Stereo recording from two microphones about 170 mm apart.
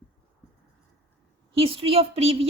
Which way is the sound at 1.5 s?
35° right (ahead or behind).